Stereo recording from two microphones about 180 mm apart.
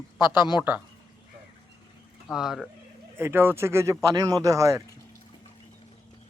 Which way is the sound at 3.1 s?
10° right (ahead or behind).